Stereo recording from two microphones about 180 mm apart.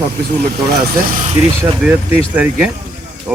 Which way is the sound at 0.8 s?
45° right (ahead or behind).